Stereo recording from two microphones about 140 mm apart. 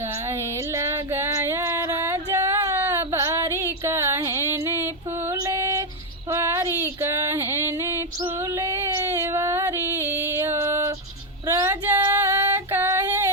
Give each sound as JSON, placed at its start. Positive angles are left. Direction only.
{"t": 0.3, "sound": "a sound", "side_deg": -20}
{"t": 6.3, "sound": "female singing", "side_deg": -20}
{"t": 9.1, "sound": "music", "side_deg": -20}
{"t": 11.4, "sound": "female singing", "side_deg": -20}